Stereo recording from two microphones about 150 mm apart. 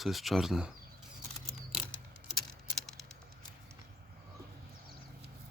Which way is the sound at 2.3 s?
Centre (ahead or behind).